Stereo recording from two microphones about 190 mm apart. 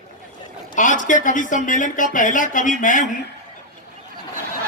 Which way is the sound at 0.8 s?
45° left (ahead or behind).